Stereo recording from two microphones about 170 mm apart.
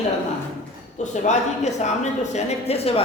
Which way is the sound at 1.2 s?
40° left (ahead or behind).